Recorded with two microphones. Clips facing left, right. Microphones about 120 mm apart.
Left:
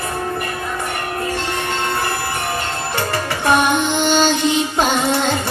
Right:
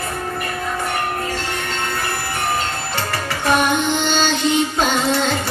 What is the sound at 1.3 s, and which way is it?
Train, 20° left (ahead or behind).